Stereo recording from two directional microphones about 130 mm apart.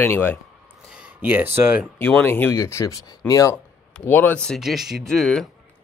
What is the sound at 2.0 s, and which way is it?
Speech, 15° left (ahead or behind).